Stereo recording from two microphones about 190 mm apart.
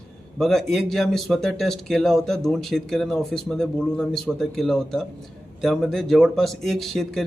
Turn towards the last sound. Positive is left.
turn(degrees=0)  # may be behind; listen again after turning